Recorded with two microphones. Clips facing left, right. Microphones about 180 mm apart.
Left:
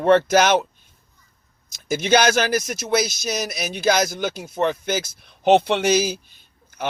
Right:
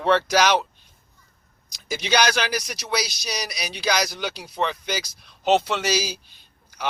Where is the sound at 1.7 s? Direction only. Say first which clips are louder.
Left 6 dB; 50° left (ahead or behind).